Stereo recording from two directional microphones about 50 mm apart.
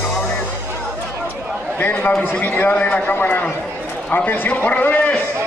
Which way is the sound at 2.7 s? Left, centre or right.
Left.